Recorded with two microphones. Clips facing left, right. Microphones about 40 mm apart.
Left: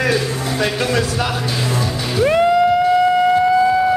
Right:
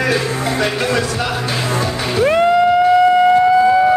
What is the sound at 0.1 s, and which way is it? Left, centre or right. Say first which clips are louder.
Music: right 2 dB; centre.